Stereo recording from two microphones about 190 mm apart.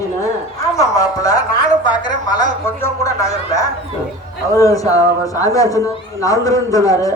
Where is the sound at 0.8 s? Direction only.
20° left (ahead or behind).